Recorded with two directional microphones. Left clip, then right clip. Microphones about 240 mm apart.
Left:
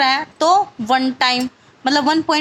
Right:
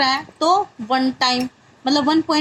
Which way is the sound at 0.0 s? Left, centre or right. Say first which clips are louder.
Left 3 dB; left.